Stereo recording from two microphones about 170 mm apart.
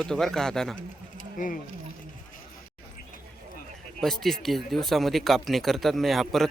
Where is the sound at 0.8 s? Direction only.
50° left (ahead or behind).